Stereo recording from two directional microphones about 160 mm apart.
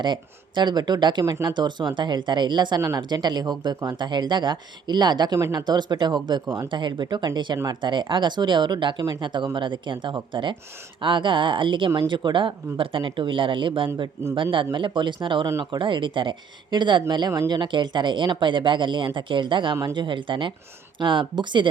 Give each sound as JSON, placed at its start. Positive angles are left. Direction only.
{"t": 0.0, "sound": "speech", "side_deg": -30}
{"t": 15.4, "sound": "speech", "side_deg": -20}
{"t": 15.8, "sound": "speech", "side_deg": -30}